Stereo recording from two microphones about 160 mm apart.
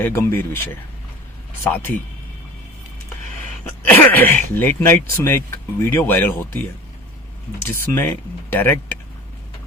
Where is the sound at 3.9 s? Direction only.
10° left (ahead or behind).